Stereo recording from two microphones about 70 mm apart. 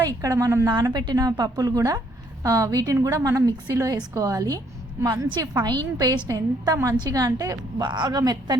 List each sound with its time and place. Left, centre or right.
0.0 s a woman's voice: right
0.7 s a woman's voice: right
5.6 s a woman's voice: right